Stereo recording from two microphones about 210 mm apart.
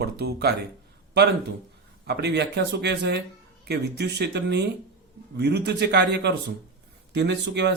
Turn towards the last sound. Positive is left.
turn(degrees=-55)  # may be behind; listen again after turning